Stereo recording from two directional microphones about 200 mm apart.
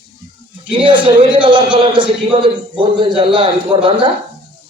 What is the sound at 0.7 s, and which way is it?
A man's voice, 25° right (ahead or behind).